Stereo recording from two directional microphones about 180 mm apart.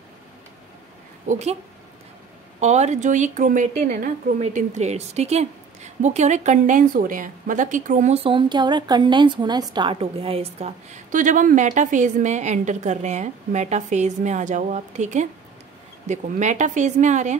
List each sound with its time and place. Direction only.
1.2 s a woman's voice: 40° right (ahead or behind)
2.6 s a woman's voice: 40° right (ahead or behind)